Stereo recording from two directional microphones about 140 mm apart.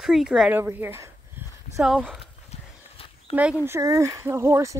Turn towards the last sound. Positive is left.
turn(degrees=-20)  # may be behind; listen again after turning